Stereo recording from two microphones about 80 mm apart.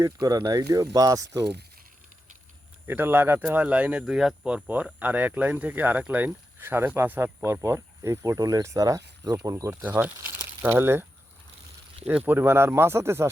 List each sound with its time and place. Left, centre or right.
0.2 s speech: right
2.8 s speech: right
8.4 s speech: right
9.8 s speech: right
12.0 s speech: right